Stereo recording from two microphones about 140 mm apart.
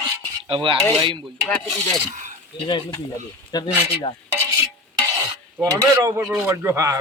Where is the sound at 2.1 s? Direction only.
65° right (ahead or behind).